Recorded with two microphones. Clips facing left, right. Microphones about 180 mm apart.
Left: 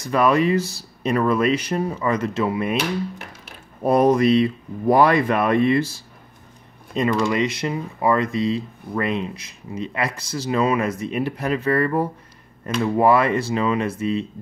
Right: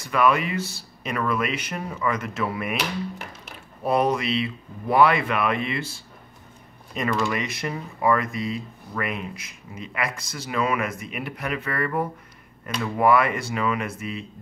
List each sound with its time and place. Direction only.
0.1 s speech: 35° left (ahead or behind)
3.8 s speech: 40° left (ahead or behind)
6.9 s speech: 25° left (ahead or behind)